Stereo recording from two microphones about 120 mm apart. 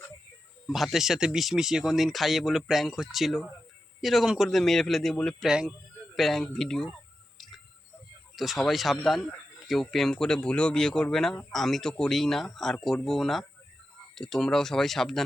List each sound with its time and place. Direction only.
0.7 s speech: centre (ahead or behind)
5.5 s speech: 5° right (ahead or behind)
7.3 s a sound: centre (ahead or behind)
8.4 s speech: centre (ahead or behind)